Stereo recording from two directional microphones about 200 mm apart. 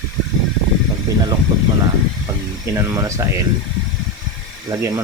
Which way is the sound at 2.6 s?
15° right (ahead or behind).